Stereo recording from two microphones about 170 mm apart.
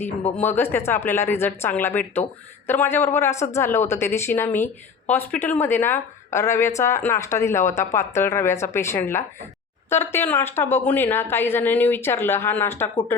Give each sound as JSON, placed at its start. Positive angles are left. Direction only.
{"t": 0.3, "sound": "speech", "side_deg": 10}